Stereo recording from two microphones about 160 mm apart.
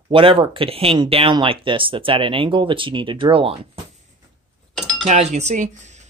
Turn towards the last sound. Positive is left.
turn(degrees=-45)  # may be behind; listen again after turning